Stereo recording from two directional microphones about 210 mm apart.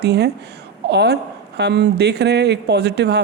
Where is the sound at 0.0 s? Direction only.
50° right (ahead or behind).